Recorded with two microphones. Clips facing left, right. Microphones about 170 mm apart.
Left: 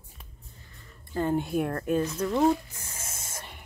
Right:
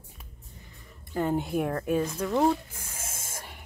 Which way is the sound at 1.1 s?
15° right (ahead or behind).